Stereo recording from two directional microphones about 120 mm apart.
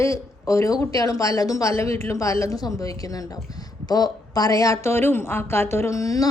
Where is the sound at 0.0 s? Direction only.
25° left (ahead or behind).